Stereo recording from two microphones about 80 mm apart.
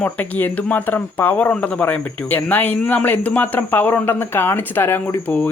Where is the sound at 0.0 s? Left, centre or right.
Left.